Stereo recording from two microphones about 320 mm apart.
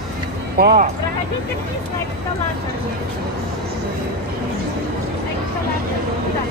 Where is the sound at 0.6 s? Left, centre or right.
Right.